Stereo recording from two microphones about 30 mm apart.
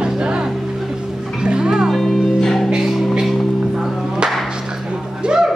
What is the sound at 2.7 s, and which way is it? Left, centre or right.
Music, right.